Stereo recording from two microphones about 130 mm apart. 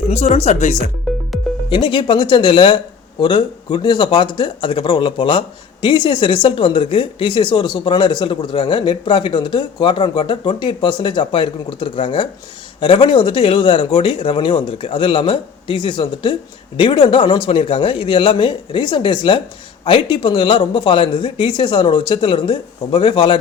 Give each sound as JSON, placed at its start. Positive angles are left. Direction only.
{"t": 0.1, "sound": "speech", "side_deg": 55}
{"t": 1.1, "sound": "music", "side_deg": 0}
{"t": 1.7, "sound": "speech", "side_deg": 40}